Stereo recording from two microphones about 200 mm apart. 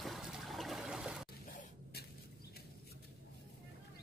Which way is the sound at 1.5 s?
45° left (ahead or behind).